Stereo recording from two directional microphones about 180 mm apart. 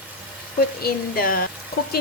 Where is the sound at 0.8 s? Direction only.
55° left (ahead or behind).